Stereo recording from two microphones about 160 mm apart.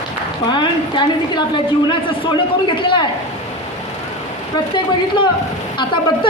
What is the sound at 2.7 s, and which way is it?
Speech, 30° left (ahead or behind).